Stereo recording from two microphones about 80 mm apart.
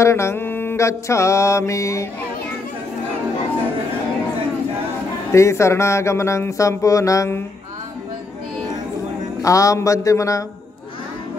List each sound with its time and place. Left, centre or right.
0.0 s music: left
5.3 s music: left
9.4 s a man's voice: left